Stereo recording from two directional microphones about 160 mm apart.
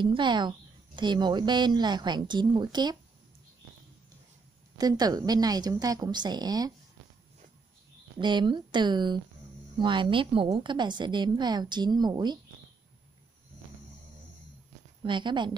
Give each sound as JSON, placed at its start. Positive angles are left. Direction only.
{"t": 0.0, "sound": "a woman's voice", "side_deg": -30}
{"t": 4.7, "sound": "a woman's voice", "side_deg": -25}
{"t": 8.2, "sound": "a woman's voice", "side_deg": -30}
{"t": 15.0, "sound": "a woman's voice", "side_deg": -30}